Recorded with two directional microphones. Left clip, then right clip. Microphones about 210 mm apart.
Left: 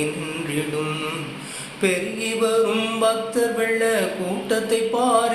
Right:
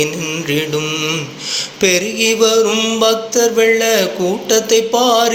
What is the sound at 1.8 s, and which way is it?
Mantra, 40° right (ahead or behind).